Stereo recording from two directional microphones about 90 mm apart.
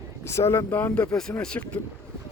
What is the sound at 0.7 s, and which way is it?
Speech, 20° left (ahead or behind).